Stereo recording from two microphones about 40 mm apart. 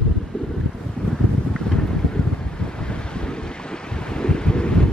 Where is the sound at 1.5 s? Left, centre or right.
Centre.